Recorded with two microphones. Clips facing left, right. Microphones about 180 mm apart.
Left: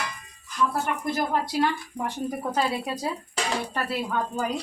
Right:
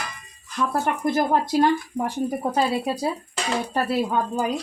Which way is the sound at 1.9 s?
30° right (ahead or behind).